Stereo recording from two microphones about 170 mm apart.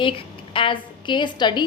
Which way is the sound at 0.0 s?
30° left (ahead or behind).